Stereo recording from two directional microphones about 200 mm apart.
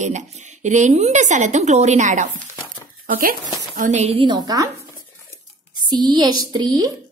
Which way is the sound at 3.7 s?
35° right (ahead or behind).